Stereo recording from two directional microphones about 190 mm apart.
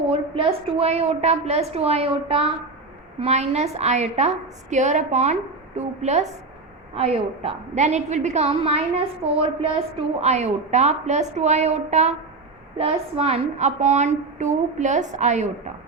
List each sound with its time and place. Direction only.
0.1 s a woman's voice: 30° right (ahead or behind)